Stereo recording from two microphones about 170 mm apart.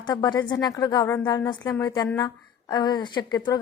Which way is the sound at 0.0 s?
25° left (ahead or behind).